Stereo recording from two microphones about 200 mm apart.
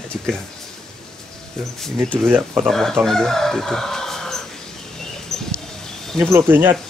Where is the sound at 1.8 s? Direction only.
Centre (ahead or behind).